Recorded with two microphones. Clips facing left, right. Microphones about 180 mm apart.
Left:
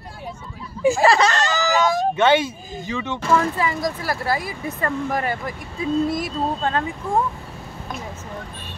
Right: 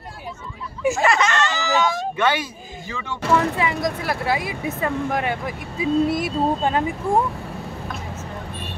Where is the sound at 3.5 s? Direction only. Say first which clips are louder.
Right 1 dB; centre (ahead or behind).